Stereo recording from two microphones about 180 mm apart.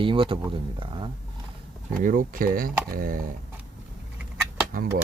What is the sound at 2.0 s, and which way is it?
Speech, 50° right (ahead or behind).